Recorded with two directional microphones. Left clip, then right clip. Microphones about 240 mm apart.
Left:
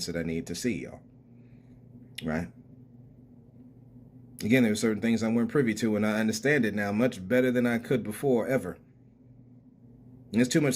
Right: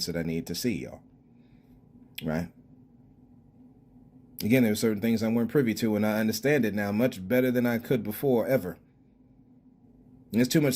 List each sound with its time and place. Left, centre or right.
0.0 s speech: right
2.1 s speech: right
4.4 s speech: right
10.3 s speech: right